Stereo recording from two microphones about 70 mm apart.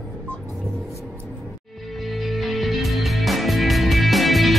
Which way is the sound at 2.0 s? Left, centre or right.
Centre.